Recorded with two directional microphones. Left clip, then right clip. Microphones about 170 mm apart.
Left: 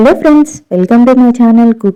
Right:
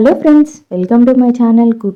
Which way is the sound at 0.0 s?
20° left (ahead or behind).